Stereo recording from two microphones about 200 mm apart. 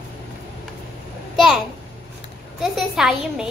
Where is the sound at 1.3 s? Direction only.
Centre (ahead or behind).